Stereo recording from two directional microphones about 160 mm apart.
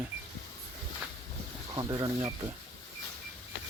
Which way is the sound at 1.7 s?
25° right (ahead or behind).